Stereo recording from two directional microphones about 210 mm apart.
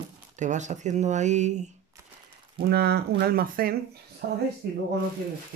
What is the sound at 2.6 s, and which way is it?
Speech, 50° right (ahead or behind).